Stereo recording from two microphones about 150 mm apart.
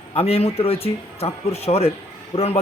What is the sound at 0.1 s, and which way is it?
A man's voice, 40° left (ahead or behind).